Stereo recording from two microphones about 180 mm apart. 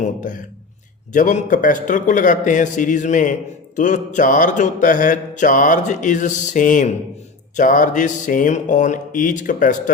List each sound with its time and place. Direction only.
0.0 s mantra: 45° left (ahead or behind)